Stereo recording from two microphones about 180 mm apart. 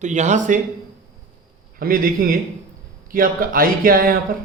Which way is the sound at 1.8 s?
55° right (ahead or behind).